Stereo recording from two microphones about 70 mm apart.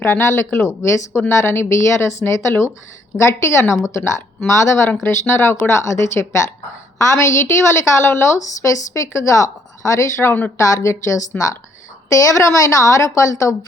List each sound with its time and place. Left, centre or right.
0.0 s a woman's voice: left